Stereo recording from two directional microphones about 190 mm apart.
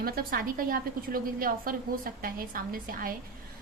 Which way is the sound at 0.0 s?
50° right (ahead or behind).